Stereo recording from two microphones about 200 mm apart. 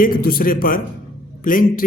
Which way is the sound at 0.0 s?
45° left (ahead or behind).